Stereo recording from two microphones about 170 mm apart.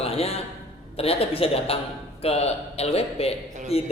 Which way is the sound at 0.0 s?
35° left (ahead or behind).